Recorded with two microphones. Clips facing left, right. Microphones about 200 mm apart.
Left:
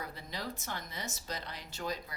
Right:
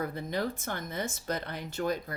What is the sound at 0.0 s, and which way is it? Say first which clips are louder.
Speech: right 9 dB; 55° right (ahead or behind).